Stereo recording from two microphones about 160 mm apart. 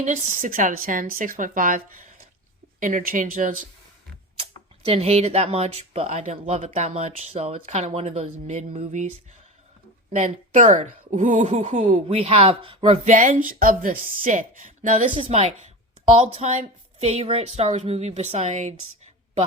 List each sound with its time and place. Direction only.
0.0 s a woman's voice: 50° right (ahead or behind)
4.4 s a woman's voice: 35° right (ahead or behind); by 6.7 s 50° right (ahead or behind)
6.7 s a woman's voice: 40° right (ahead or behind)
11.9 s a woman's voice: 35° right (ahead or behind)
13.1 s a woman's voice: 50° right (ahead or behind)
15.1 s a woman's voice: 35° right (ahead or behind)